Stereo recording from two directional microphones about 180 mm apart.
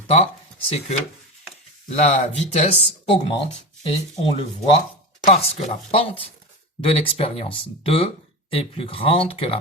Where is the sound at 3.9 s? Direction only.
35° left (ahead or behind).